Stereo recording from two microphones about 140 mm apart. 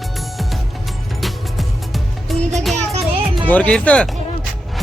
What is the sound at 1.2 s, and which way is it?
Music, centre (ahead or behind).